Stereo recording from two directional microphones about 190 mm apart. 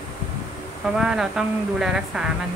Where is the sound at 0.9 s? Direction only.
5° right (ahead or behind).